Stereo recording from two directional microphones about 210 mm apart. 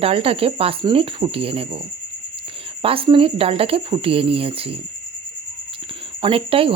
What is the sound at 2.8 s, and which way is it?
Speech, 25° right (ahead or behind).